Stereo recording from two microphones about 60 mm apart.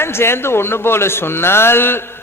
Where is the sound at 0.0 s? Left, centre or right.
Left.